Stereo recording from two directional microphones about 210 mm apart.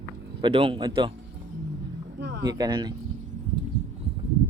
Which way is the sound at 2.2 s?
55° right (ahead or behind).